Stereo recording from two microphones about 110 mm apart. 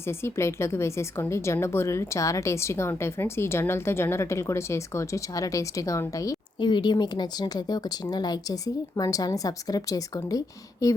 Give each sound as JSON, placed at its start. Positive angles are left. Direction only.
{"t": 0.1, "sound": "a woman's voice", "side_deg": 25}
{"t": 6.6, "sound": "speech", "side_deg": 45}